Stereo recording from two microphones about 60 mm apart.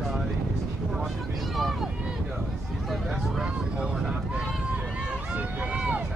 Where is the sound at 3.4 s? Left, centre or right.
Centre.